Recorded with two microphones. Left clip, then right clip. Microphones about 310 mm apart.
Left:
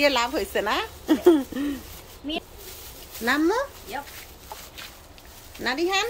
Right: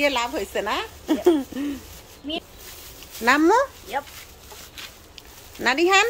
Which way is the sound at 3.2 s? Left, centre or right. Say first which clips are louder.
Right 6 dB; centre.